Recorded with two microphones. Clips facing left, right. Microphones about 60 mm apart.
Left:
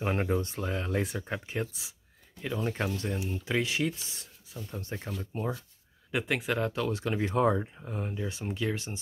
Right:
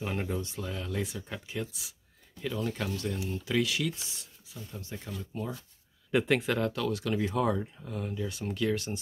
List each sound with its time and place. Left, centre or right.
0.0 s speech: left
6.1 s speech: centre